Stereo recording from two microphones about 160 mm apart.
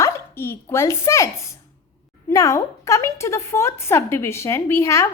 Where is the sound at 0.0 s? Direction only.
15° left (ahead or behind).